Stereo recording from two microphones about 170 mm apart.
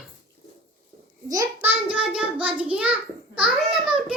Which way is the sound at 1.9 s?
5° right (ahead or behind).